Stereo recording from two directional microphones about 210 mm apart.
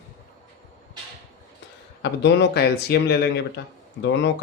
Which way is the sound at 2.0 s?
55° left (ahead or behind).